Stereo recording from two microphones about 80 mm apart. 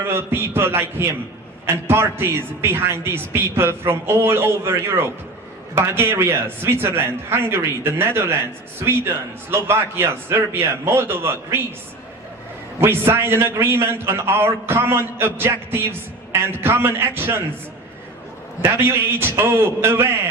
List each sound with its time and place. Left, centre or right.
0.0 s a man's voice: right
9.5 s a man's voice: right
12.8 s a man's voice: right
18.6 s a man's voice: right